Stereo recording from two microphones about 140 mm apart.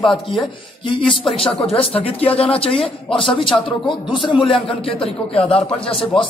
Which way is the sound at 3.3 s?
35° left (ahead or behind).